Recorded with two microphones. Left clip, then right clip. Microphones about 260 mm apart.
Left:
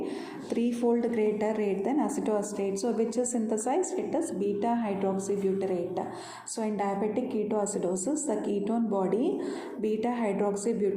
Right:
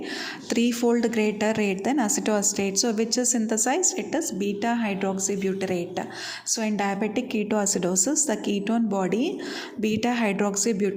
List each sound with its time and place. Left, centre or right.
0.5 s a woman's voice: right